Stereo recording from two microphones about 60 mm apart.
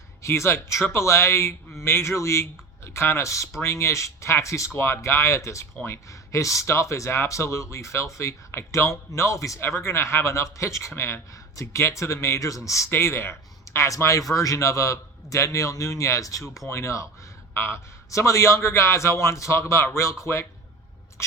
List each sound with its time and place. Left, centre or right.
0.2 s a man's voice: left
4.7 s speech: left
9.6 s a man's voice: left
11.3 s a sound: left
11.6 s speech: left
12.9 s a man's voice: left